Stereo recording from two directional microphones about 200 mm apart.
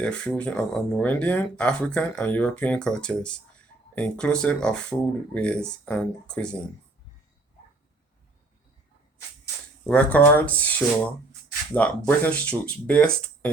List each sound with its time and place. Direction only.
0.0 s speech: 5° left (ahead or behind)
9.8 s speech: 5° left (ahead or behind)